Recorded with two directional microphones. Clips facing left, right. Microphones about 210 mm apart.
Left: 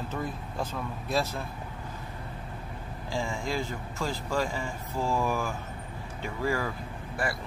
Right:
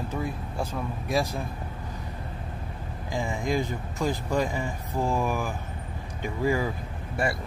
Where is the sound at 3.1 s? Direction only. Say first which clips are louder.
Right 4 dB; 20° right (ahead or behind).